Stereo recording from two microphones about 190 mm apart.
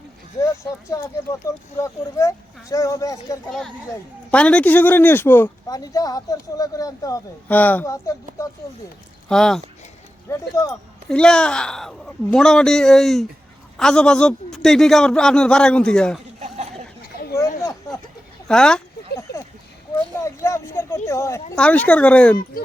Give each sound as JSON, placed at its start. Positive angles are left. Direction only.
{"t": 0.6, "sound": "speech", "side_deg": 15}
{"t": 4.3, "sound": "speech", "side_deg": 5}
{"t": 9.3, "sound": "a man's voice", "side_deg": 5}
{"t": 10.2, "sound": "speech", "side_deg": 15}
{"t": 11.1, "sound": "a man's voice", "side_deg": 5}
{"t": 17.0, "sound": "a sound", "side_deg": 50}
{"t": 17.6, "sound": "a sound", "side_deg": 15}
{"t": 18.4, "sound": "a sound", "side_deg": 5}
{"t": 20.2, "sound": "speech", "side_deg": 15}